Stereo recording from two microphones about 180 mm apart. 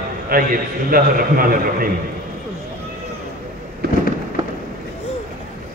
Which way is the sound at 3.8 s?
60° right (ahead or behind).